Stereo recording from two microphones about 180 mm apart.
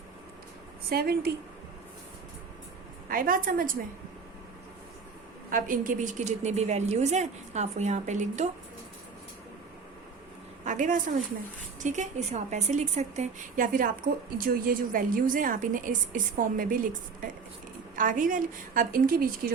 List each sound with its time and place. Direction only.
0.9 s a woman's voice: 60° right (ahead or behind)
3.1 s a woman's voice: 50° right (ahead or behind)
5.5 s a woman's voice: 50° right (ahead or behind)
10.6 s a woman's voice: 45° right (ahead or behind)